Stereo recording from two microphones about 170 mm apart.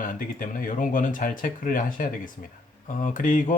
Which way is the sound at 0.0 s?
50° left (ahead or behind).